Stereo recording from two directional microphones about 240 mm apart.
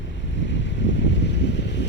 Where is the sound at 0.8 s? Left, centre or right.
Left.